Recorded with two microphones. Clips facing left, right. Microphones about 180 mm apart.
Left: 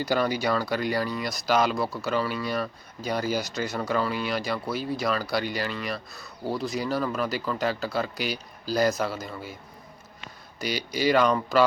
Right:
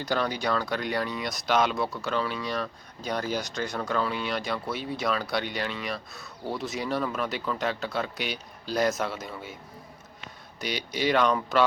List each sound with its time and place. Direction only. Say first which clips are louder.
0.0 s speech: left 3 dB; 5° left (ahead or behind)
10.6 s speech: left 2 dB; centre (ahead or behind)